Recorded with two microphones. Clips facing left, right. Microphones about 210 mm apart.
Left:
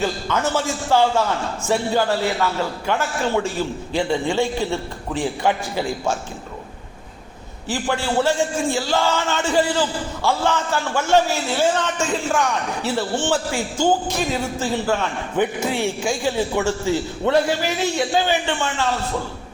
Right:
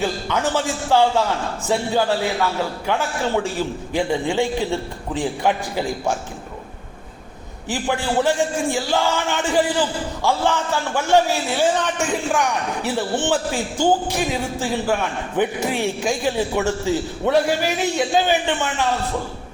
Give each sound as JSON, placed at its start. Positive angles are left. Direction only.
{"t": 0.0, "sound": "a man's voice", "side_deg": -15}
{"t": 7.7, "sound": "a man's voice", "side_deg": -15}